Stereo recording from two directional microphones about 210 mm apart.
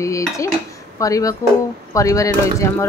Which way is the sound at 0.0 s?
15° left (ahead or behind).